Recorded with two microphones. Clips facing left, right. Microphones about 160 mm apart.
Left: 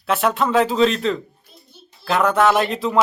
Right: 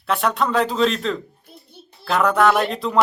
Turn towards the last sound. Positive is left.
turn(degrees=0)  # may be behind; listen again after turning